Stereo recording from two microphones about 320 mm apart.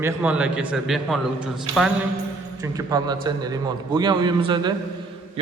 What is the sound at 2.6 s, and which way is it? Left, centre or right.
A man's voice, centre.